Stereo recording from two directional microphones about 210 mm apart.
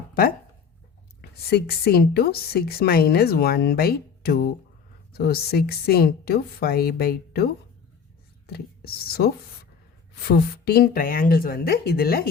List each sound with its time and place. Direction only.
0.1 s a woman's voice: 45° left (ahead or behind)